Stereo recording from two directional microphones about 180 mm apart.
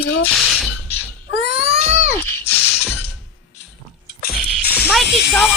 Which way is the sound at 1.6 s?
35° right (ahead or behind).